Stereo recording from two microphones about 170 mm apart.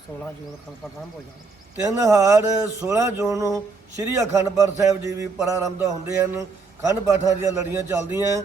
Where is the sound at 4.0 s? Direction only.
20° right (ahead or behind).